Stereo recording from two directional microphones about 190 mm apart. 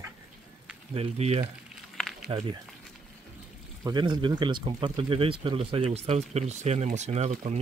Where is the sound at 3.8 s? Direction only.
20° right (ahead or behind).